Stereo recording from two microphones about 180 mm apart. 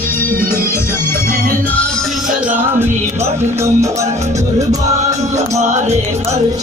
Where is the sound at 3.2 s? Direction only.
15° right (ahead or behind).